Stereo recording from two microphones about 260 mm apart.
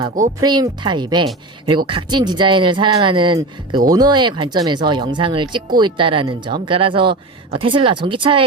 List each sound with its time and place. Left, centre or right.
0.3 s speech: centre